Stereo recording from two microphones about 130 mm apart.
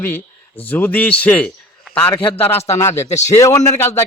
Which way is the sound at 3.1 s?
60° left (ahead or behind).